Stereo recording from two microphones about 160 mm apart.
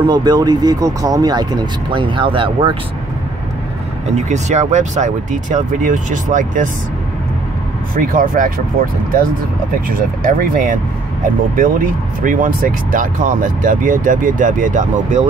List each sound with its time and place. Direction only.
0.0 s speech: 25° right (ahead or behind)
4.1 s speech: 45° right (ahead or behind)
7.9 s speech: 60° right (ahead or behind)
9.8 s speech: 60° right (ahead or behind)